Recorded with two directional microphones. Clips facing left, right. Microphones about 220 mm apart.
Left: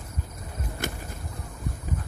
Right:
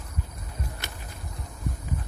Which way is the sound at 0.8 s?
50° left (ahead or behind).